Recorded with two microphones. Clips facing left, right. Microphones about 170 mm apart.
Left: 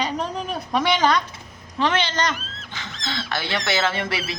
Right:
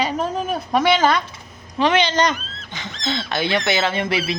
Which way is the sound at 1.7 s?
15° right (ahead or behind).